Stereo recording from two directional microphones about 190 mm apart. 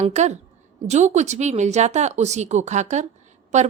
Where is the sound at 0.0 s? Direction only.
35° right (ahead or behind).